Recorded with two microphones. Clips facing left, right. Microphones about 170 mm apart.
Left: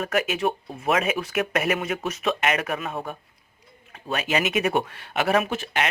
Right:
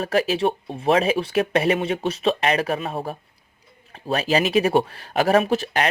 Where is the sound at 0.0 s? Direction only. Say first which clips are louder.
Right 4 dB; 30° right (ahead or behind).